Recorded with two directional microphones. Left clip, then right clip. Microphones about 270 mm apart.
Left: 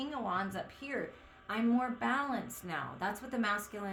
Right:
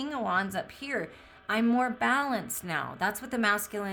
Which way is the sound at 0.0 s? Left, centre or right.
Right.